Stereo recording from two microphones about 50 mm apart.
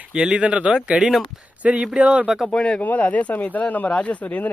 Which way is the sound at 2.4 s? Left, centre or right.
Centre.